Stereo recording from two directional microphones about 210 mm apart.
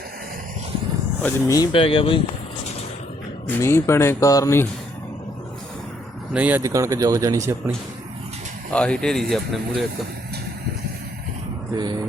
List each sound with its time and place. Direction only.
1.2 s speech: 15° left (ahead or behind)
3.4 s speech: 10° left (ahead or behind)
6.3 s speech: 10° right (ahead or behind)
8.7 s speech: 5° left (ahead or behind)